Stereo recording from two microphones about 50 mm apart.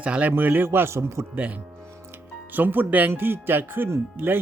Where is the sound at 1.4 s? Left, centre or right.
Right.